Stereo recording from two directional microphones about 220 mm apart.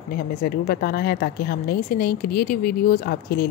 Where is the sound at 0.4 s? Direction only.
45° left (ahead or behind).